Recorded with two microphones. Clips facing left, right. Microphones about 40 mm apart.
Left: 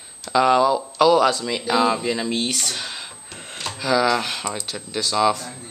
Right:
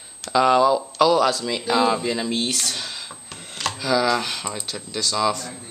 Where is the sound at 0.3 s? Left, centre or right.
Centre.